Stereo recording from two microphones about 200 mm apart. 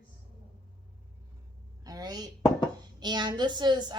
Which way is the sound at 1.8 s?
20° right (ahead or behind).